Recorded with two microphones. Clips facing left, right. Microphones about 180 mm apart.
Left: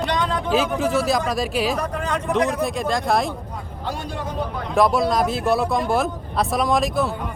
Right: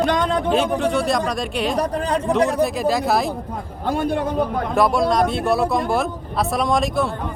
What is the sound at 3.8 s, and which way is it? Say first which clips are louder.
Speech: right 8 dB; 55° right (ahead or behind).